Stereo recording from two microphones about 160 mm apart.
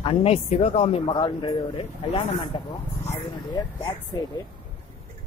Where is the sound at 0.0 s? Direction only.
35° left (ahead or behind).